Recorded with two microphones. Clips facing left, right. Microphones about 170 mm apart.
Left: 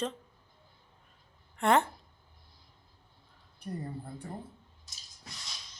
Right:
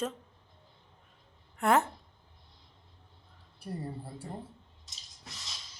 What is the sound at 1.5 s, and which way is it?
Speech, 5° right (ahead or behind).